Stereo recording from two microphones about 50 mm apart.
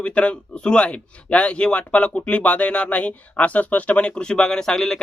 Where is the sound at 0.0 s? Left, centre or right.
Left.